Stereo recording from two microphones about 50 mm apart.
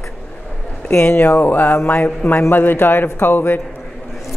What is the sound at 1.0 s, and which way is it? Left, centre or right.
Speech, left.